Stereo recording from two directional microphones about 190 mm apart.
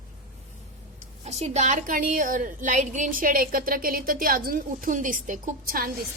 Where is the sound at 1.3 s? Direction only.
35° right (ahead or behind).